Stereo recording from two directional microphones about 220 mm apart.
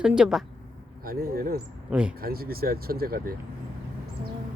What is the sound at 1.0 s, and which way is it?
Speech, 40° right (ahead or behind).